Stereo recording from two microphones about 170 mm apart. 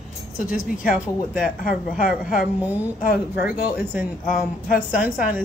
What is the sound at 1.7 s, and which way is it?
Speech, 55° left (ahead or behind).